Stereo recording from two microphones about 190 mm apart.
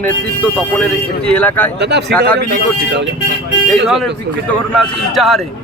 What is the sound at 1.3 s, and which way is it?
Speech, 5° left (ahead or behind).